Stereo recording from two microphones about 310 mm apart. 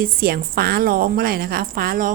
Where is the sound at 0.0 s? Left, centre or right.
Right.